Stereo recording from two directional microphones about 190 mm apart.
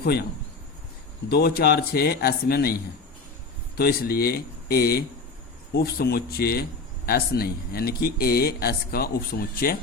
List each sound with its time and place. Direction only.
0.0 s speech: 55° left (ahead or behind)
1.3 s speech: 55° left (ahead or behind)
3.8 s a man's voice: 55° left (ahead or behind)